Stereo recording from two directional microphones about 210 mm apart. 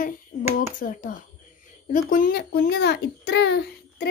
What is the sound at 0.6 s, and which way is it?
A child's voice, 40° left (ahead or behind).